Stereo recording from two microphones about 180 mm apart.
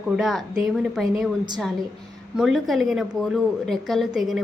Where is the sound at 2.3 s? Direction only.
Centre (ahead or behind).